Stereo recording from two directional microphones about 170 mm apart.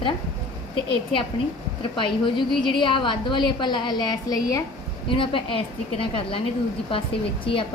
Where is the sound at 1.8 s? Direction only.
30° left (ahead or behind).